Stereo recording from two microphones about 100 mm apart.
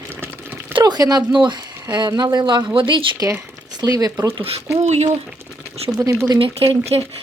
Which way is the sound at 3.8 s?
40° right (ahead or behind).